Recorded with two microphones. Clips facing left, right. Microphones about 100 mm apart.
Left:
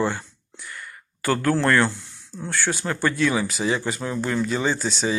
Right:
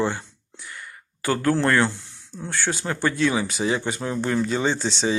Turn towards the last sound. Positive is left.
turn(degrees=-25)  # may be behind; listen again after turning